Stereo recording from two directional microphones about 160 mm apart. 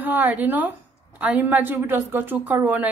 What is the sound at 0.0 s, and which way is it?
A woman's voice, 10° right (ahead or behind).